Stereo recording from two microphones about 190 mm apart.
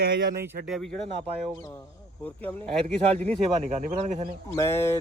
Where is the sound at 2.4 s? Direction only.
5° left (ahead or behind).